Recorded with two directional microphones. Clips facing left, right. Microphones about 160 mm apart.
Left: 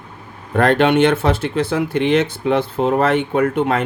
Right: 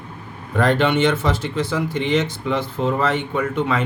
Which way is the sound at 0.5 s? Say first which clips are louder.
Left 4 dB; 60° left (ahead or behind).